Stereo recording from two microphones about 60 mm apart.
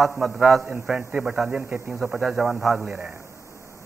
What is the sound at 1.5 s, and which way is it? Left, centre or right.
A man's voice, centre.